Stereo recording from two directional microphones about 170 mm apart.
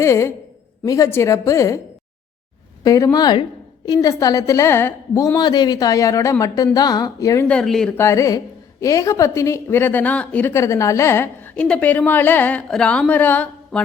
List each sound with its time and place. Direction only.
0.0 s a woman's voice: 15° left (ahead or behind)
2.8 s a woman's voice: 20° left (ahead or behind)
7.4 s speech: 5° left (ahead or behind)
7.9 s a woman's voice: 15° left (ahead or behind)